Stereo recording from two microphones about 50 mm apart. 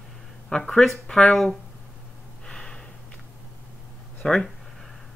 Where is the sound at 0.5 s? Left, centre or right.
Centre.